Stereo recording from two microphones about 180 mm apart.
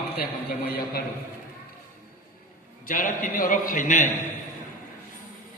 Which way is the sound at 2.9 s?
50° left (ahead or behind).